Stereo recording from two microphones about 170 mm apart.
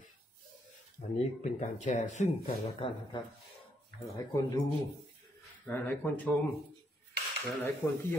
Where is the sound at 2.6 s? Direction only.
30° left (ahead or behind).